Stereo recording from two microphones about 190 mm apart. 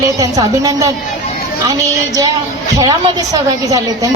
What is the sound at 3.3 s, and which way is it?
Speech, 20° right (ahead or behind).